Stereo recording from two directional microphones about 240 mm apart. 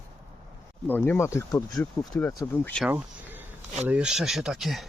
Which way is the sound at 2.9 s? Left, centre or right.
Centre.